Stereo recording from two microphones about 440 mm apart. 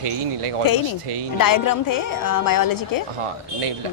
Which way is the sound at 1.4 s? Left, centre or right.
Left.